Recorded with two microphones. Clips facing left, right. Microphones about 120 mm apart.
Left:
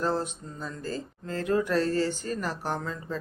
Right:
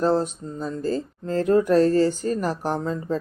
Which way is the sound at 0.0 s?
40° right (ahead or behind).